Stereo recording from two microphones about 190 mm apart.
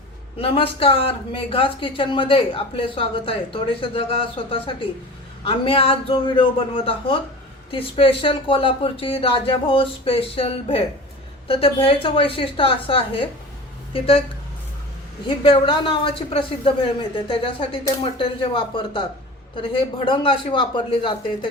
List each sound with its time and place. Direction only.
0.3 s speech: 30° left (ahead or behind)
15.3 s speech: 25° left (ahead or behind)
20.1 s speech: 30° left (ahead or behind)